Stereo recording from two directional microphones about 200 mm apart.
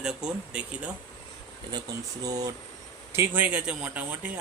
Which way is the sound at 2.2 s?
20° right (ahead or behind).